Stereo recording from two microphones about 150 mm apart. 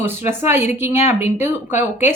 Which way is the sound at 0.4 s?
15° right (ahead or behind).